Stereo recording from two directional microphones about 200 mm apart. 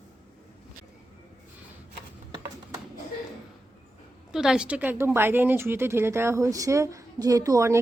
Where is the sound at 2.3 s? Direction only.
15° right (ahead or behind).